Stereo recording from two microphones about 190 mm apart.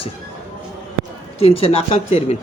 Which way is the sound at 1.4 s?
30° left (ahead or behind).